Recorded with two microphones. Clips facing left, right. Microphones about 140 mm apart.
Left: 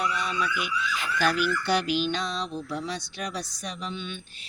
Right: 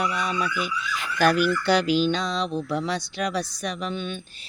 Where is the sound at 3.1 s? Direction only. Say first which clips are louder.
Right 7 dB; 75° right (ahead or behind); by 4.4 s 40° right (ahead or behind).